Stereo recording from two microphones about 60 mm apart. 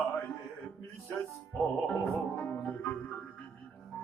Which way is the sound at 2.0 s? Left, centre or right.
Left.